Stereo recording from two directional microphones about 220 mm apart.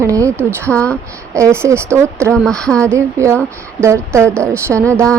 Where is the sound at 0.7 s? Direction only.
5° left (ahead or behind).